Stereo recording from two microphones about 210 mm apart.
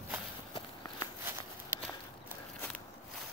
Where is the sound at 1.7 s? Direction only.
10° right (ahead or behind).